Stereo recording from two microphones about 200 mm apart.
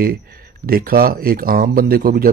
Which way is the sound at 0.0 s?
50° right (ahead or behind).